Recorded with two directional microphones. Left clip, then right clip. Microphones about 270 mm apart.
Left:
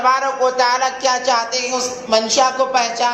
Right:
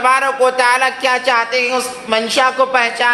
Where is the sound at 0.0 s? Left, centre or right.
Right.